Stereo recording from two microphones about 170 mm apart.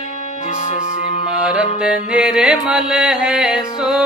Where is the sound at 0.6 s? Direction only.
40° left (ahead or behind).